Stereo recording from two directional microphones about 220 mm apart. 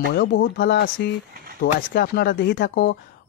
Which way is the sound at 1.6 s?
45° left (ahead or behind).